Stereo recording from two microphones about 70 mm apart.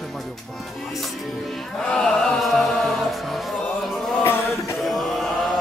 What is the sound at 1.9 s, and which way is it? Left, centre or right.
Music, centre.